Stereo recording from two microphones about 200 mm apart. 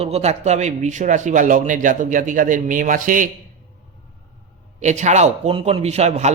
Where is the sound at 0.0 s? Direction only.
30° right (ahead or behind).